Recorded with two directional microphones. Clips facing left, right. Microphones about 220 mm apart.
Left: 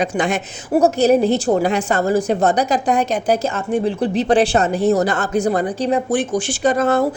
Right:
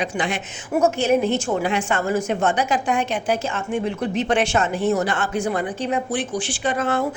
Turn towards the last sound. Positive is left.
turn(degrees=40)  # may be behind; listen again after turning